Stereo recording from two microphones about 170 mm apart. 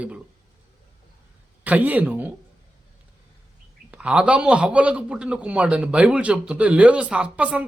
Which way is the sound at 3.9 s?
5° right (ahead or behind).